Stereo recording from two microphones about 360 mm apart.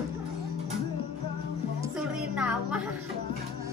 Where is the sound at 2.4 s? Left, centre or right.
Centre.